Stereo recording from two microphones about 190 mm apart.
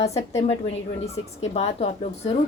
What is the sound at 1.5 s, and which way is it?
Speech, 35° left (ahead or behind).